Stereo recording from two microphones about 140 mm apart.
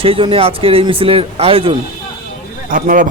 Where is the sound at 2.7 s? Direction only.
75° right (ahead or behind).